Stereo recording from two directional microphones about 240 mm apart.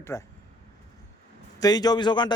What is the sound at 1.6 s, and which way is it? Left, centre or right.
Speech, centre.